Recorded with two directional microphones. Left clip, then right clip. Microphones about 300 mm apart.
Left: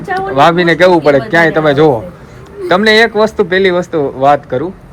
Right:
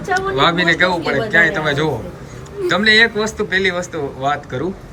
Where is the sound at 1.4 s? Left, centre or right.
Centre.